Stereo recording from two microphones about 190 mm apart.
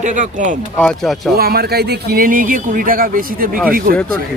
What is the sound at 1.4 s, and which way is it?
Speech, 55° right (ahead or behind).